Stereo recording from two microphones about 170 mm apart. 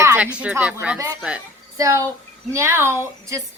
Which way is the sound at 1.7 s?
20° right (ahead or behind).